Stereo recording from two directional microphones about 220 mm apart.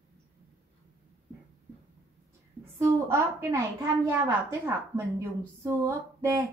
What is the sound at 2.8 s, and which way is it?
A woman's voice, 15° right (ahead or behind).